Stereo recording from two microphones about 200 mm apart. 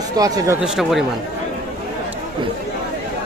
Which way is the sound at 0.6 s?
Centre (ahead or behind).